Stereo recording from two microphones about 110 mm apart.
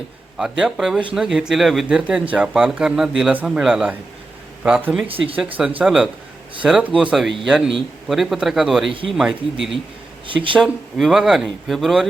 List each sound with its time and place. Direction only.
0.3 s speech: 5° right (ahead or behind)
5.0 s speech: 55° right (ahead or behind)
5.8 s speech: 5° right (ahead or behind)
10.2 s speech: 50° right (ahead or behind)
10.6 s speech: centre (ahead or behind)